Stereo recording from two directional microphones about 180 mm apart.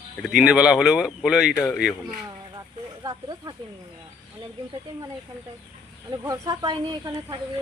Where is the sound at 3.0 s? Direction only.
20° right (ahead or behind).